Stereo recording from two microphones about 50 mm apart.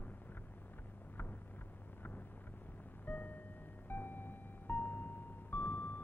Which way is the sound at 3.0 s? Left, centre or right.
Left.